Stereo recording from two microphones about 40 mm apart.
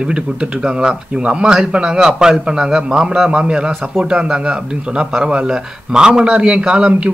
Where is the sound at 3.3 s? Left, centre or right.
Right.